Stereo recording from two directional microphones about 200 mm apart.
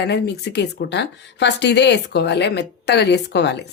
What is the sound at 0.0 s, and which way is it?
A woman's voice, 55° left (ahead or behind).